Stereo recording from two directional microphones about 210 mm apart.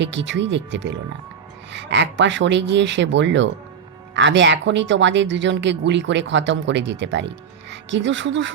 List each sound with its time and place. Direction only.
0.0 s speech: 60° right (ahead or behind)